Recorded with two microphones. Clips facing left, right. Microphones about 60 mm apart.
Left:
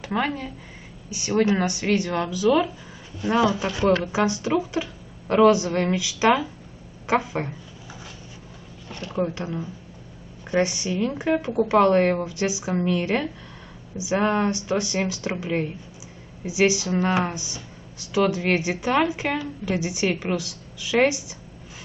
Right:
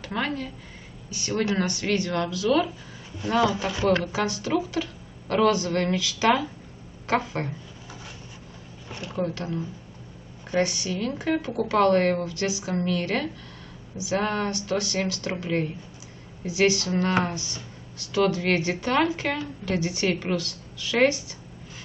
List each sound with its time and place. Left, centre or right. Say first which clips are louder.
0.0 s speech: left 3 dB; centre
3.6 s speech: left 2 dB; centre
3.9 s speech: left 3 dB; centre
7.1 s a sound: left 2 dB; centre
8.8 s a sound: left 1 dB; centre
9.2 s speech: left 2 dB; centre